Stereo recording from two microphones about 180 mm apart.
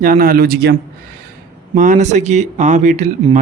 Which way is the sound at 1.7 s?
45° right (ahead or behind).